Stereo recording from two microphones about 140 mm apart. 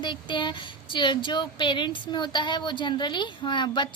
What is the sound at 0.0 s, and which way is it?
A woman's voice, 35° left (ahead or behind).